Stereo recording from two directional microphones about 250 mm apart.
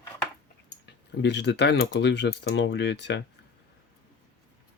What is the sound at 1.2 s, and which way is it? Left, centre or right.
Speech, left.